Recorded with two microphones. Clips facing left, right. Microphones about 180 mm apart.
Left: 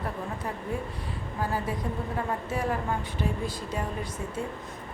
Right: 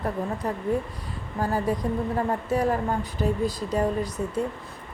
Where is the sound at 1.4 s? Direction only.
45° right (ahead or behind).